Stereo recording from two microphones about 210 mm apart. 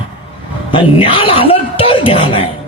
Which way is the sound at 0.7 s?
25° left (ahead or behind).